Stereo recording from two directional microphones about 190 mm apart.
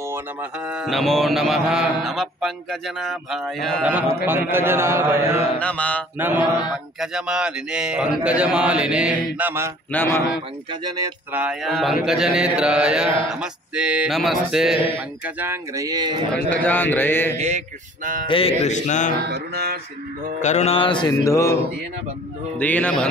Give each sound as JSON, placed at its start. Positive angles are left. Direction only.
{"t": 0.1, "sound": "speech", "side_deg": -5}
{"t": 4.3, "sound": "speech", "side_deg": -10}
{"t": 5.6, "sound": "mantra", "side_deg": 5}
{"t": 6.1, "sound": "speech", "side_deg": -10}
{"t": 9.9, "sound": "mantra", "side_deg": 10}
{"t": 10.7, "sound": "speech", "side_deg": -20}
{"t": 11.3, "sound": "speech", "side_deg": -5}
{"t": 16.4, "sound": "mantra", "side_deg": 10}
{"t": 17.4, "sound": "speech", "side_deg": -40}
{"t": 18.2, "sound": "speech", "side_deg": 30}
{"t": 19.2, "sound": "mantra", "side_deg": -55}
{"t": 20.4, "sound": "mantra", "side_deg": 35}
{"t": 22.6, "sound": "mantra", "side_deg": 10}